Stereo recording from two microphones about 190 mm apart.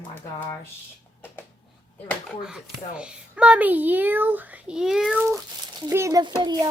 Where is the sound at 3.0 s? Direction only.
5° right (ahead or behind).